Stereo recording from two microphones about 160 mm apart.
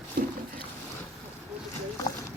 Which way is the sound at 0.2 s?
65° right (ahead or behind).